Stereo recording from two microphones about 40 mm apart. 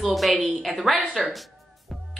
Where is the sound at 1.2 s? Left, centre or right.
Centre.